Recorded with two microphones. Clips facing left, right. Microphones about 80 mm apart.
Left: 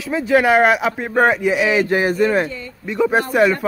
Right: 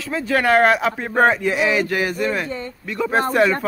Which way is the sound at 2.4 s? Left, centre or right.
Right.